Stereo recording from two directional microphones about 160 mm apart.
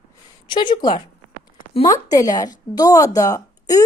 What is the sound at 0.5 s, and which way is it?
A woman's voice, 30° left (ahead or behind).